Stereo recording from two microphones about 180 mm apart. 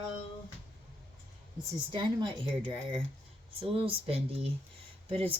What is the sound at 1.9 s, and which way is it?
Speech, 25° right (ahead or behind).